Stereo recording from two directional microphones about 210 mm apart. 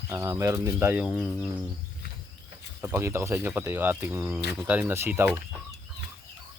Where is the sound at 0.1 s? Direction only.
15° right (ahead or behind).